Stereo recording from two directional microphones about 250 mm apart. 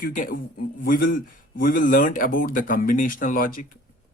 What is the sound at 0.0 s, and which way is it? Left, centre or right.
Speech, left.